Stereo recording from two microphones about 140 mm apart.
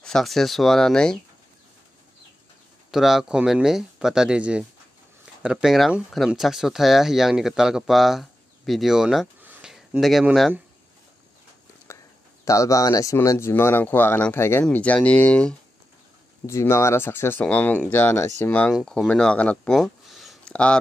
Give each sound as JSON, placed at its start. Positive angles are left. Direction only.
{"t": 0.0, "sound": "speech", "side_deg": 0}
{"t": 2.9, "sound": "speech", "side_deg": 0}
{"t": 9.4, "sound": "a sound", "side_deg": -10}
{"t": 11.9, "sound": "a sound", "side_deg": 20}
{"t": 12.4, "sound": "speech", "side_deg": 20}
{"t": 16.4, "sound": "speech", "side_deg": 20}